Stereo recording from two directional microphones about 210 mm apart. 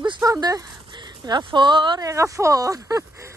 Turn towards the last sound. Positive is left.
turn(degrees=-15)  # may be behind; listen again after turning